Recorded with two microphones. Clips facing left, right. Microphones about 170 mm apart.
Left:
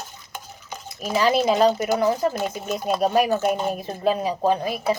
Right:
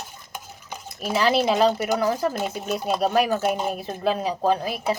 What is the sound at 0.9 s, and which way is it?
Speech, 5° right (ahead or behind).